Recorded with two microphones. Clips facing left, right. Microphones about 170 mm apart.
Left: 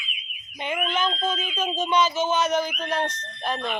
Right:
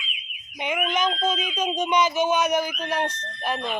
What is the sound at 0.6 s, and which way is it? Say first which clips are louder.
Speech: right 1 dB; 15° right (ahead or behind).